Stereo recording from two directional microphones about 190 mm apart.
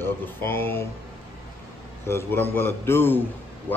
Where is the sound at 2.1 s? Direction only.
10° left (ahead or behind).